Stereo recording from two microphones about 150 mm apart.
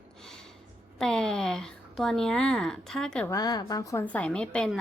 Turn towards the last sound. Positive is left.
turn(degrees=5)  # may be behind; listen again after turning